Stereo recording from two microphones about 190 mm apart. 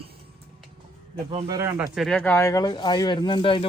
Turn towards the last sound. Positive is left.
turn(degrees=25)  # may be behind; listen again after turning